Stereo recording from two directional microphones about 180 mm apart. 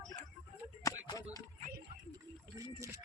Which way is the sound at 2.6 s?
15° right (ahead or behind).